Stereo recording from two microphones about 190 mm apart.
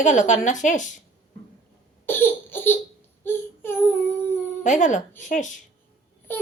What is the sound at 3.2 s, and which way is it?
Child singing, 10° left (ahead or behind).